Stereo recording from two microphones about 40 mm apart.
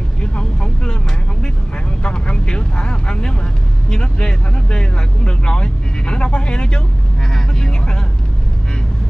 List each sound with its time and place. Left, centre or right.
0.2 s vehicle: left
2.0 s vehicle: left
3.9 s speech: left
7.3 s vehicle: centre